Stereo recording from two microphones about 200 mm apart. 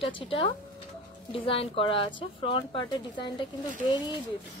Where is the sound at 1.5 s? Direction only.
25° left (ahead or behind).